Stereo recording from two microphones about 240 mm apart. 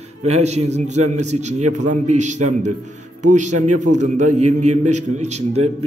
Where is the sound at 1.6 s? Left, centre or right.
Right.